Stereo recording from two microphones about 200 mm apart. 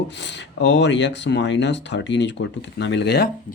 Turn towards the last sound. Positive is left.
turn(degrees=60)  # may be behind; listen again after turning